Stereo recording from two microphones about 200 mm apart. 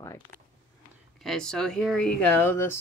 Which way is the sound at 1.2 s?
Centre (ahead or behind).